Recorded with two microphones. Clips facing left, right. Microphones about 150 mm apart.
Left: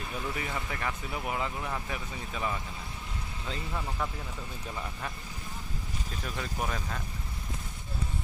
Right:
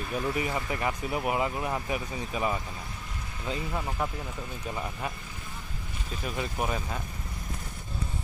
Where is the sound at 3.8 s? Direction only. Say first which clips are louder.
Right 3 dB; 20° right (ahead or behind).